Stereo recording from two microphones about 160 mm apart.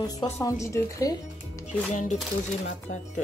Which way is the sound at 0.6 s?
20° left (ahead or behind).